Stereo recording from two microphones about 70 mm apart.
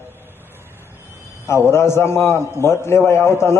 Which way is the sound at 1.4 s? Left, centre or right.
Left.